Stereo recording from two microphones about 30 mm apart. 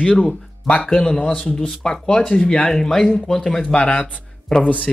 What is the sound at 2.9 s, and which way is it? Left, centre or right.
Speech, centre.